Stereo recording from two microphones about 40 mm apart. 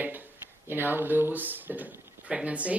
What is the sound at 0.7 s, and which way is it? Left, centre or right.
Speech, right.